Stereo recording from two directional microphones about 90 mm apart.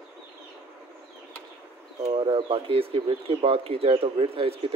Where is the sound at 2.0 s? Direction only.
90° right.